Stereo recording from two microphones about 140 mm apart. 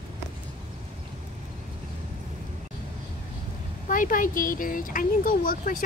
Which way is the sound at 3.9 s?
75° left (ahead or behind).